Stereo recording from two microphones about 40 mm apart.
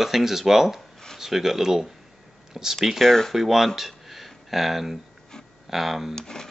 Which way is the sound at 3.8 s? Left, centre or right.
Centre.